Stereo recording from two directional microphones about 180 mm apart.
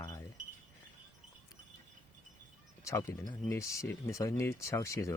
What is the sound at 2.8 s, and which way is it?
Speech, 15° left (ahead or behind).